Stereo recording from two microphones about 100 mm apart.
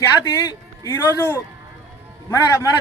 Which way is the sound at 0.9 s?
20° left (ahead or behind).